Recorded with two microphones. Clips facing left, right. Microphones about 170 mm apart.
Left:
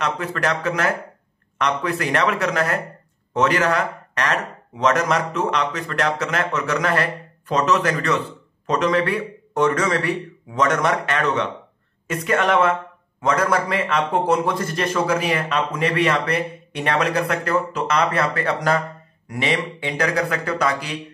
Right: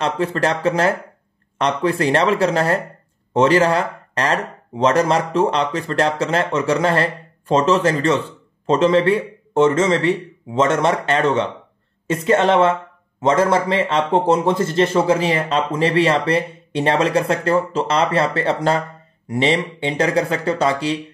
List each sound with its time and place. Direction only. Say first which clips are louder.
0.0 s a man's voice: right 4 dB; 30° right (ahead or behind)